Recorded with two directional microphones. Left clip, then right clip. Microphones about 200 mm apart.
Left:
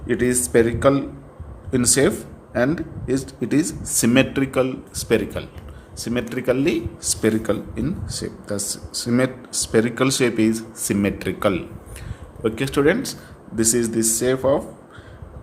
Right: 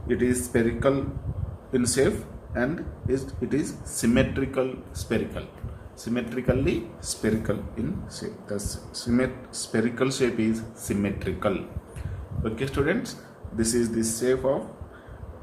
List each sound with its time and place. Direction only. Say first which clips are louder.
0.1 s speech: left 6 dB; 55° left (ahead or behind)